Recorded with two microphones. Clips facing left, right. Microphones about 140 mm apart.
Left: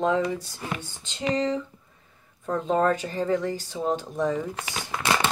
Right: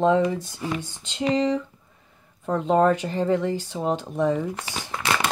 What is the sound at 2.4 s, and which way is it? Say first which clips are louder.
Speech: right 3 dB; 20° right (ahead or behind).